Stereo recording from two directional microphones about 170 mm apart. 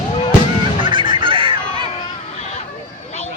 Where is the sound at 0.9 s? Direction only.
30° right (ahead or behind).